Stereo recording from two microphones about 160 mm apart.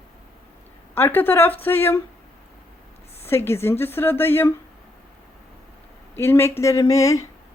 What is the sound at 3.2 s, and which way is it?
Speech, 15° left (ahead or behind).